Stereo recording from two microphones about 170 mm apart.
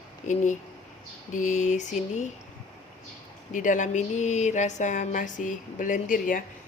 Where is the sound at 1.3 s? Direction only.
45° left (ahead or behind).